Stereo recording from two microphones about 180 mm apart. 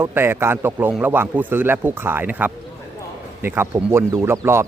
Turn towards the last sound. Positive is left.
turn(degrees=-15)  # may be behind; listen again after turning